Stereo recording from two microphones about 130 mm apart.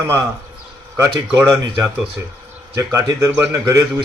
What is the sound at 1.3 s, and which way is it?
Speech, 10° right (ahead or behind).